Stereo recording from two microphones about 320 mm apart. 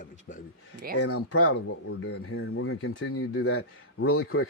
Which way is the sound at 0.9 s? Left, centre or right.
Left.